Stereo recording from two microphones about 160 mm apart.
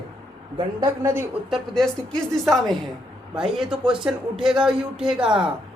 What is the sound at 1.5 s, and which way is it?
Speech, centre (ahead or behind).